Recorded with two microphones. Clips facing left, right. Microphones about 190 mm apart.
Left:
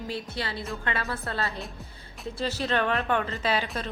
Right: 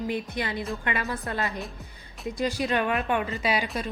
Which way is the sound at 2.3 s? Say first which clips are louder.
Right 2 dB; 15° right (ahead or behind).